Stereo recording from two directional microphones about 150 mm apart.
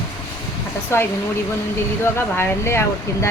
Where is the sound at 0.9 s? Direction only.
15° left (ahead or behind).